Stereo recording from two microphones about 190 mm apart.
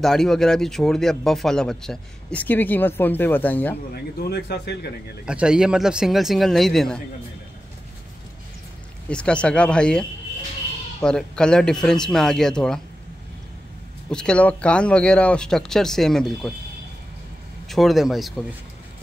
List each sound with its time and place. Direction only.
0.0 s speech: centre (ahead or behind)
3.9 s speech: 55° left (ahead or behind)
5.2 s speech: 5° right (ahead or behind)
9.1 s speech: 5° left (ahead or behind)
14.1 s speech: 5° left (ahead or behind)
17.6 s speech: centre (ahead or behind)